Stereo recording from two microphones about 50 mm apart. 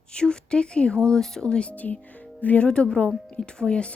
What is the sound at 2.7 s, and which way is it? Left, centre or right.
A woman's voice, centre.